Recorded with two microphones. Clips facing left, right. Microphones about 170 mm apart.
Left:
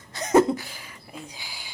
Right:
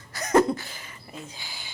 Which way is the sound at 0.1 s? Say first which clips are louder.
Left 1 dB; 25° left (ahead or behind).